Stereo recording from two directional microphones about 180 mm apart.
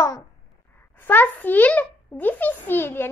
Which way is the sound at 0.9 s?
10° left (ahead or behind).